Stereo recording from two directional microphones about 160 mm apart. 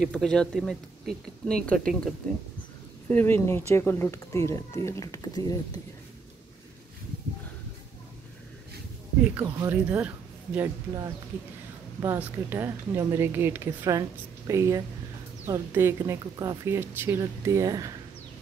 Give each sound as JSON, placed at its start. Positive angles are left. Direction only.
{"t": 0.0, "sound": "speech", "side_deg": 5}
{"t": 9.2, "sound": "speech", "side_deg": -10}
{"t": 12.0, "sound": "speech", "side_deg": -15}